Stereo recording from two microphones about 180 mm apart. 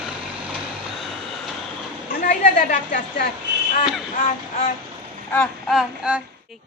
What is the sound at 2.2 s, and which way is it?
A woman's voice, 50° left (ahead or behind).